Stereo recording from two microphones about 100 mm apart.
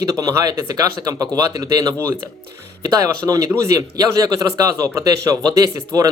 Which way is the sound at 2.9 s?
35° right (ahead or behind).